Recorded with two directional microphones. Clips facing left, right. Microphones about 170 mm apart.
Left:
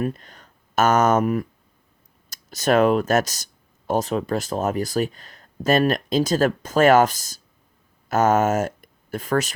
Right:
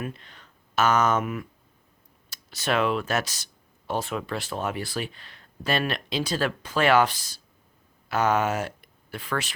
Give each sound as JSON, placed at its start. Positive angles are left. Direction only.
{"t": 0.0, "sound": "speech", "side_deg": 45}